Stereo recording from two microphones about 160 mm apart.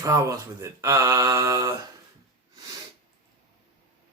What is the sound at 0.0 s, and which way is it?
Speech, 20° right (ahead or behind).